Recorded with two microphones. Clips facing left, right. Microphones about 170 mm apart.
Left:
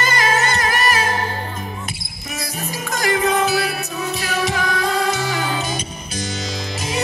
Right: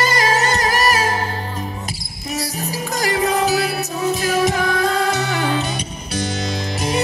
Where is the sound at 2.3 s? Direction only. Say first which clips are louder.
Right 3 dB; 35° right (ahead or behind).